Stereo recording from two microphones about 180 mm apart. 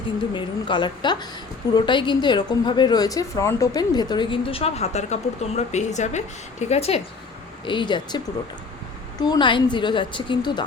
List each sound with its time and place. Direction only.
0.3 s a woman's voice: 25° left (ahead or behind)